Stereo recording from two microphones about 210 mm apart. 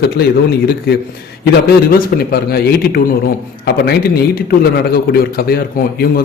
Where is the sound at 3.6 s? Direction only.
50° left (ahead or behind).